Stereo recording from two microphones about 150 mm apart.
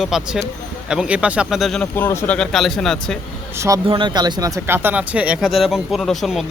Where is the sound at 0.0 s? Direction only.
Centre (ahead or behind).